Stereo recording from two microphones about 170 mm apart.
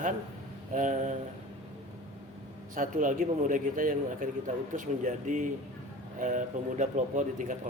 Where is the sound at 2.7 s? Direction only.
50° right (ahead or behind).